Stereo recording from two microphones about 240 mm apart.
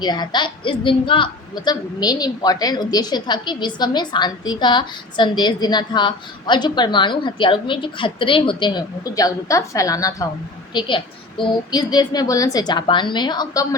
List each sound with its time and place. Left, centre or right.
0.0 s a woman's voice: centre